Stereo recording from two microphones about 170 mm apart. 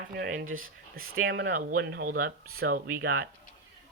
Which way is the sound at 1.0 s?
80° right.